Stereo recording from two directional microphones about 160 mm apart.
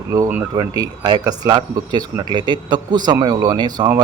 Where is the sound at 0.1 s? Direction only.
20° right (ahead or behind).